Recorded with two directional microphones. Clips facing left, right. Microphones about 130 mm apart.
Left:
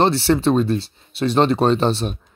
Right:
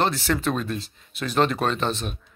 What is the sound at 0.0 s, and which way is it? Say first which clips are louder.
Speech: left 7 dB; 30° left (ahead or behind).